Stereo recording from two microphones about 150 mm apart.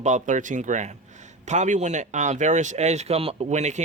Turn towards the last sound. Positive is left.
turn(degrees=-50)  # may be behind; listen again after turning